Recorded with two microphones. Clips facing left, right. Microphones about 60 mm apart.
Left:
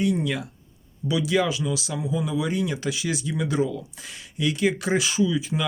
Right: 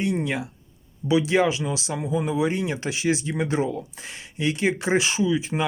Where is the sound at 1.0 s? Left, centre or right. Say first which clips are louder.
Right 3 dB; right.